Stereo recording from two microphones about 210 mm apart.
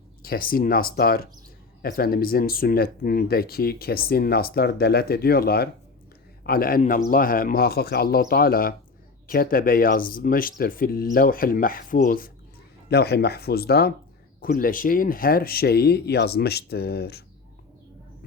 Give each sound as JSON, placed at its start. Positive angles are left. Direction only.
{"t": 0.2, "sound": "speech", "side_deg": 45}